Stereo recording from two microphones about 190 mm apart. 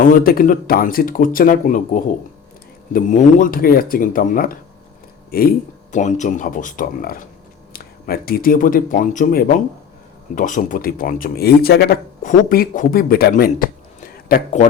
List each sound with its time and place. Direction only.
0.0 s a man's voice: 45° left (ahead or behind)